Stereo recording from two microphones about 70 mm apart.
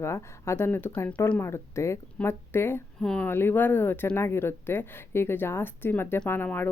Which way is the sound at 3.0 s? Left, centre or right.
Centre.